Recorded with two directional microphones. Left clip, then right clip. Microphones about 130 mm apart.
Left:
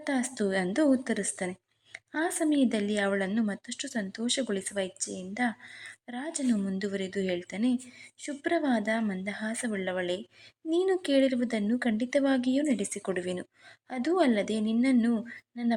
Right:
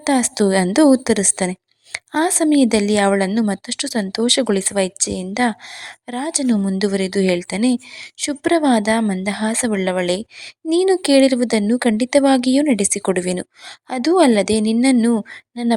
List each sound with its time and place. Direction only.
0.0 s a woman's voice: 55° right (ahead or behind)